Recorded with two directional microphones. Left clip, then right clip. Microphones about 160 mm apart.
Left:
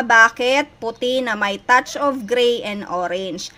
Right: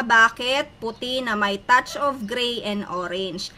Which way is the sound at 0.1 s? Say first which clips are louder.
Left 4 dB; 30° left (ahead or behind).